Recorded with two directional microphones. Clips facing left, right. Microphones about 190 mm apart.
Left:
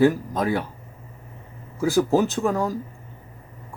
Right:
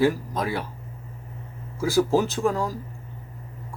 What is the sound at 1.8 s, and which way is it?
Speech, 20° left (ahead or behind).